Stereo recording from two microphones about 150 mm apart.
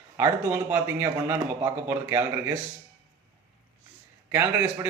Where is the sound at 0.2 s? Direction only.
15° right (ahead or behind).